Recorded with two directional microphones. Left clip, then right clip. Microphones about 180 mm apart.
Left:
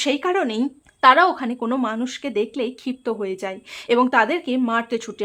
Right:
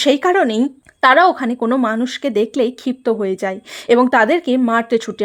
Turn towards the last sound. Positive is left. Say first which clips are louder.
# right 7 dB
turn(degrees=-30)  # may be behind; listen again after turning